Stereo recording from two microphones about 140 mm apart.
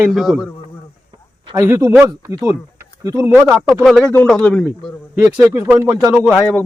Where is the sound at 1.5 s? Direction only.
20° right (ahead or behind).